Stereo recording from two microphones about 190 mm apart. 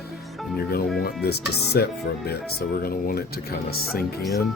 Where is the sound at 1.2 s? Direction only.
60° left (ahead or behind).